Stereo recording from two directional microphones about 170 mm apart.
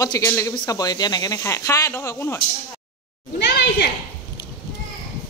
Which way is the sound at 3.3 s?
80° left.